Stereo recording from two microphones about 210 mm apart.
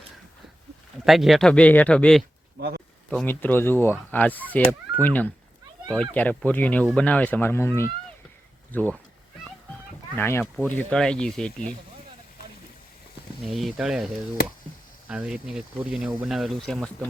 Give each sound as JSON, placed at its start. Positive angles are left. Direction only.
{"t": 1.0, "sound": "speech", "side_deg": 0}
{"t": 2.6, "sound": "speech", "side_deg": -50}
{"t": 3.1, "sound": "speech", "side_deg": 5}
{"t": 10.2, "sound": "speech", "side_deg": 10}
{"t": 13.5, "sound": "speech", "side_deg": 0}
{"t": 15.1, "sound": "speech", "side_deg": -5}